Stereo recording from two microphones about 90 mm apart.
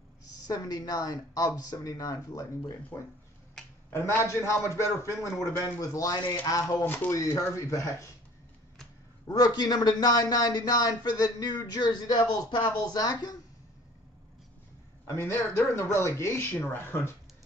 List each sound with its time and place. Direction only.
0.3 s a woman's voice: 45° left (ahead or behind)
2.9 s a man's voice: 25° left (ahead or behind); by 6.8 s 40° left (ahead or behind)
6.8 s a man's voice: 25° left (ahead or behind)
9.3 s a man's voice: 45° left (ahead or behind)
15.0 s speech: 25° left (ahead or behind)